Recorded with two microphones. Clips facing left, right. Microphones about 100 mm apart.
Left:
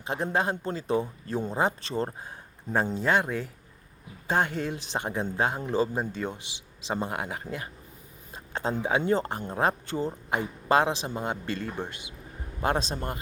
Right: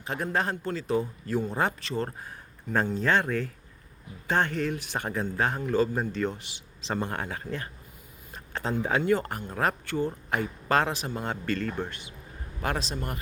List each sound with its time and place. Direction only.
0.0 s speech: 20° left (ahead or behind)
1.8 s speech: 30° left (ahead or behind)
2.0 s a man's voice: 20° left (ahead or behind)